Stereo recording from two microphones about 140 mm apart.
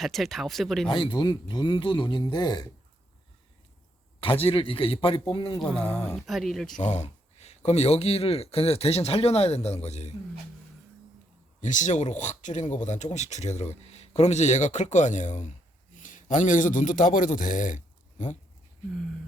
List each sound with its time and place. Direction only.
0.0 s speech: centre (ahead or behind)
0.9 s speech: 40° left (ahead or behind)
4.2 s speech: 40° left (ahead or behind)
6.1 s speech: centre (ahead or behind)
6.8 s speech: 55° left (ahead or behind)
11.6 s a man's voice: 60° left (ahead or behind)